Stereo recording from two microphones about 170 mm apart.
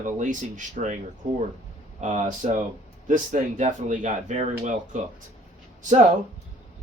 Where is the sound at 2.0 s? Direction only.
45° right (ahead or behind).